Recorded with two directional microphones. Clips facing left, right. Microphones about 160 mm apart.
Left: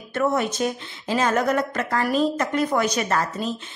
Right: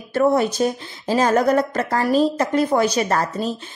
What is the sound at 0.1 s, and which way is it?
Speech, 35° right (ahead or behind).